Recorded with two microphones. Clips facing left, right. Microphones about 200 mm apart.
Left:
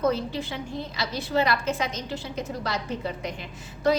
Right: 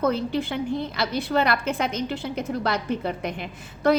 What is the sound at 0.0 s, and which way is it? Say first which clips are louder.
A woman's voice: right 2 dB; 55° right (ahead or behind).